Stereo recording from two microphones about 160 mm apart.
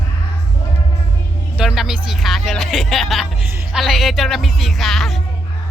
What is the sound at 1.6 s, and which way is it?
Speech, 5° right (ahead or behind).